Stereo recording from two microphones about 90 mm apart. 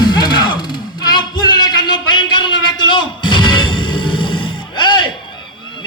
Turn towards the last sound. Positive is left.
turn(degrees=60)  # may be behind; listen again after turning